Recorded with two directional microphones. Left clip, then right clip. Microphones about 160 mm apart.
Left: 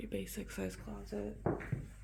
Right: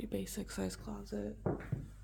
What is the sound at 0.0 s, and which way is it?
Speech, 20° right (ahead or behind).